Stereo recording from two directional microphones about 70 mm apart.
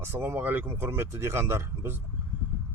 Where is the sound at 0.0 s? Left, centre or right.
Right.